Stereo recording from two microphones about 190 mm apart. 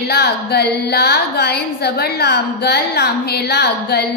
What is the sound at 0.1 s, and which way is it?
A woman's voice, 60° left (ahead or behind).